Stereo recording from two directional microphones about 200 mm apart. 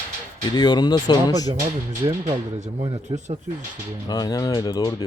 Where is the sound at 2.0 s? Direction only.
25° right (ahead or behind).